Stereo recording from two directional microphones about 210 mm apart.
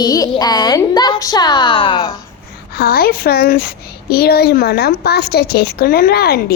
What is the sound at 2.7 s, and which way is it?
A woman's voice, 45° left (ahead or behind).